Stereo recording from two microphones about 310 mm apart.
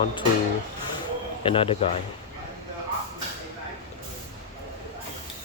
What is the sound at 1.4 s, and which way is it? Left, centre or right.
Speech, centre.